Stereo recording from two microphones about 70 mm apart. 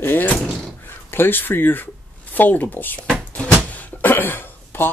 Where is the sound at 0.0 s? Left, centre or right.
Left.